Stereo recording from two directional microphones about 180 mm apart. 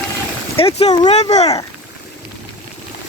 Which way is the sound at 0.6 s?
35° left (ahead or behind).